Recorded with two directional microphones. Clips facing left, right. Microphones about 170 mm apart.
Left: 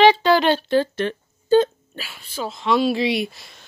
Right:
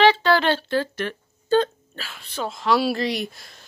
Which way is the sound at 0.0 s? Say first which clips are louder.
Left 3 dB; 15° left (ahead or behind).